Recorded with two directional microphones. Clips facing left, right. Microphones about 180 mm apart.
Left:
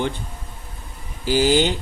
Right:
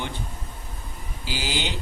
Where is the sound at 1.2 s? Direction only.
50° left (ahead or behind).